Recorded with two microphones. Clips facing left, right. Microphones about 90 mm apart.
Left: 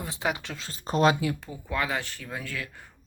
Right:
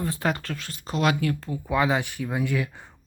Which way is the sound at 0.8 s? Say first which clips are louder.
Left 3 dB; 40° left (ahead or behind).